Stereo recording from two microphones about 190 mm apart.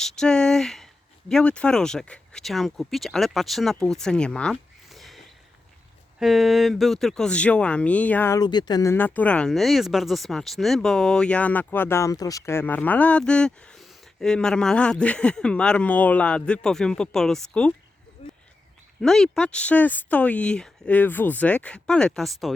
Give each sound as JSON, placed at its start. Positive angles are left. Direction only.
{"t": 0.0, "sound": "speech", "side_deg": 5}
{"t": 18.2, "sound": "a sound", "side_deg": 30}
{"t": 19.0, "sound": "speech", "side_deg": 0}